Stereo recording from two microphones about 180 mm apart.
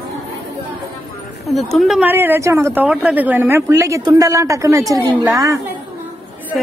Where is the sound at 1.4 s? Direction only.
Centre (ahead or behind); by 5.6 s 20° right (ahead or behind).